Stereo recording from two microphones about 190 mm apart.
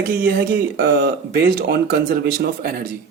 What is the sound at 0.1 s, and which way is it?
Speech, 50° right (ahead or behind).